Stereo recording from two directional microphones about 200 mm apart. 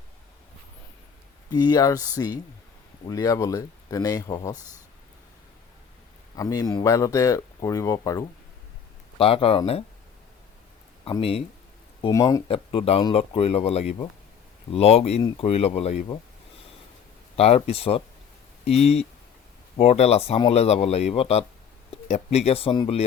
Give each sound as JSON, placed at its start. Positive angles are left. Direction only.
{"t": 1.5, "sound": "speech", "side_deg": 20}
{"t": 6.3, "sound": "speech", "side_deg": 15}
{"t": 9.1, "sound": "speech", "side_deg": 30}
{"t": 11.0, "sound": "speech", "side_deg": 30}
{"t": 12.0, "sound": "speech", "side_deg": 15}
{"t": 12.5, "sound": "speech", "side_deg": 30}
{"t": 17.3, "sound": "speech", "side_deg": 30}